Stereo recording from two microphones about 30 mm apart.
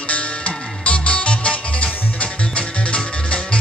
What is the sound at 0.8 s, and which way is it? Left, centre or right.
Music, left.